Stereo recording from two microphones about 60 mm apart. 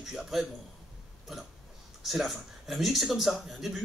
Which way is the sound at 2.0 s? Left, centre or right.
Centre.